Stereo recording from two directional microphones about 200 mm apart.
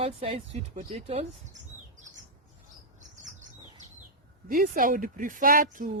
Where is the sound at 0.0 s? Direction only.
30° right (ahead or behind).